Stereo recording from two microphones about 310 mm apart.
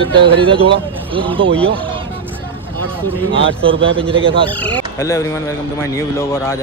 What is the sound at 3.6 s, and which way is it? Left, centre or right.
Speech, centre.